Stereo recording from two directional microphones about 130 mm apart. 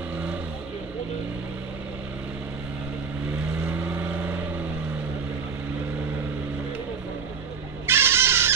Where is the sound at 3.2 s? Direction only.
15° right (ahead or behind).